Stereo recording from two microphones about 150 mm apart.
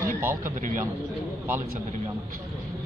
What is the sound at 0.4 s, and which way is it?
Speech, 60° right (ahead or behind).